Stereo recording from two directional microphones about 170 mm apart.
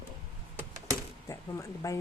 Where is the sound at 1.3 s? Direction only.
20° left (ahead or behind).